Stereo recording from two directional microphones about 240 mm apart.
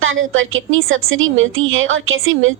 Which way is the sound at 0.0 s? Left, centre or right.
Right.